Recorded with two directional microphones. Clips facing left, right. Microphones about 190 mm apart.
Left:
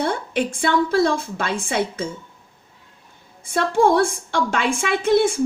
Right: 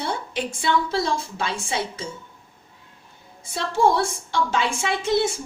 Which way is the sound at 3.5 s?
55° left (ahead or behind).